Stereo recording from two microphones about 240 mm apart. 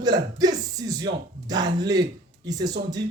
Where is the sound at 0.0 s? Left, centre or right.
Centre.